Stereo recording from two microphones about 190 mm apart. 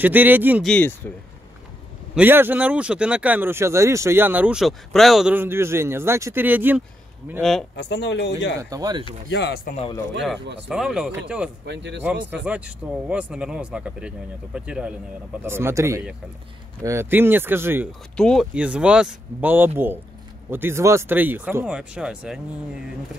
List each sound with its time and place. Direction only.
0.0 s speech: 10° right (ahead or behind)
0.7 s speech: 10° left (ahead or behind)
2.1 s speech: 10° right (ahead or behind)
7.7 s speech: 65° left (ahead or behind)
8.5 s speech: 20° right (ahead or behind)
9.3 s speech: 60° left (ahead or behind)
10.7 s speech: 5° right (ahead or behind)
11.6 s speech: 65° right (ahead or behind)
12.4 s speech: 5° right (ahead or behind)
18.1 s speech: 5° left (ahead or behind)